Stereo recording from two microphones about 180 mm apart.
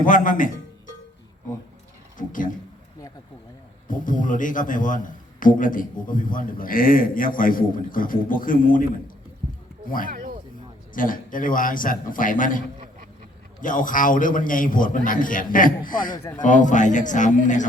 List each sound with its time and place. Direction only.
0.0 s a man's voice: 50° left (ahead or behind)
2.1 s a sound: 50° left (ahead or behind)
3.8 s a man's voice: 45° left (ahead or behind)
10.9 s a man's voice: 50° left (ahead or behind)